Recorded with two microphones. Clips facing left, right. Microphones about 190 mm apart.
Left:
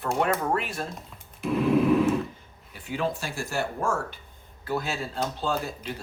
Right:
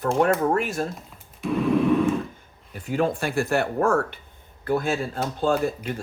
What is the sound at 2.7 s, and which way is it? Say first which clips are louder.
Speech: right 5 dB; 45° right (ahead or behind).